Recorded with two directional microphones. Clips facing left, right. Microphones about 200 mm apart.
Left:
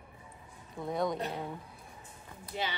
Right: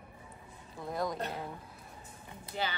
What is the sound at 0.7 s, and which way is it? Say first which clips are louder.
Speech: left 3 dB; centre (ahead or behind).